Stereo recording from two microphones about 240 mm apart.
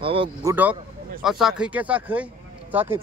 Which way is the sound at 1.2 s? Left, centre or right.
Centre.